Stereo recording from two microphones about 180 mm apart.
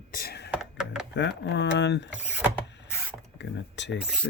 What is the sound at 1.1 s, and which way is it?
Speech, 75° left (ahead or behind).